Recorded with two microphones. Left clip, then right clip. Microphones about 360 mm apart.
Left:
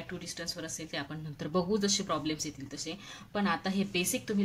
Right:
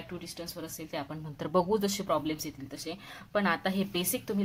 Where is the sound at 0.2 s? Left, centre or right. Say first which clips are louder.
Left 2 dB; centre.